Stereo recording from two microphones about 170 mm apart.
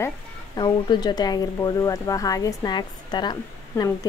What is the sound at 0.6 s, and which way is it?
Speech, 25° left (ahead or behind).